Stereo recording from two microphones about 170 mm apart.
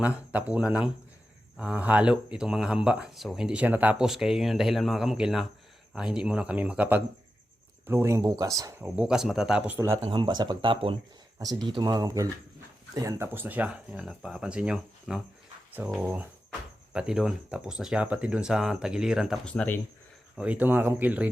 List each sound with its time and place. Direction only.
0.0 s speech: 10° right (ahead or behind)
8.8 s speech: 5° right (ahead or behind)
10.0 s speech: 25° right (ahead or behind); by 19.8 s 10° left (ahead or behind)
20.3 s speech: 5° right (ahead or behind)